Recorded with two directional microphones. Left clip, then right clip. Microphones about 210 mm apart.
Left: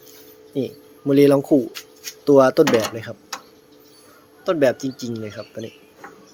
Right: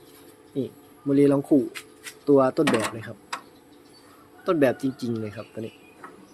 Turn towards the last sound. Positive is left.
turn(degrees=5)  # may be behind; listen again after turning